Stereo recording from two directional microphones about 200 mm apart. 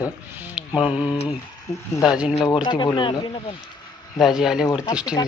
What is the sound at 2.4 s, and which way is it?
Speech, 20° left (ahead or behind).